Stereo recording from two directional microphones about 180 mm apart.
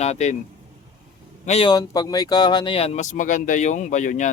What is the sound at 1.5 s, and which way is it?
Speech, 30° left (ahead or behind).